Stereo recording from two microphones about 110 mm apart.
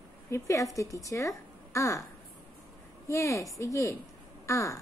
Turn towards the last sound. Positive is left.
turn(degrees=30)  # may be behind; listen again after turning